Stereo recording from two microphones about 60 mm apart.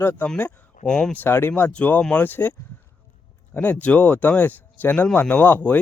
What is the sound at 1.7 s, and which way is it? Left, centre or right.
Speech, left.